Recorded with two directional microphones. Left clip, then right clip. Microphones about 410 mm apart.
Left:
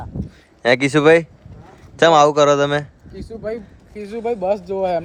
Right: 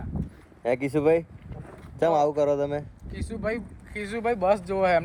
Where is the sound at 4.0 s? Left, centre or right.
Right.